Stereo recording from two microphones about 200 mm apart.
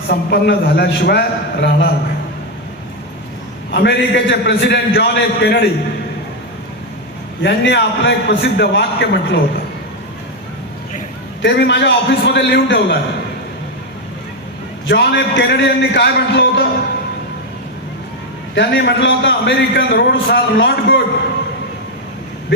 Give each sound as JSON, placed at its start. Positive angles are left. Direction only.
{"t": 0.1, "sound": "a man's voice", "side_deg": 55}
{"t": 3.7, "sound": "a man's voice", "side_deg": 60}
{"t": 7.4, "sound": "a man's voice", "side_deg": 65}
{"t": 11.4, "sound": "a man's voice", "side_deg": 60}
{"t": 14.8, "sound": "a man's voice", "side_deg": 60}
{"t": 18.5, "sound": "a man's voice", "side_deg": 60}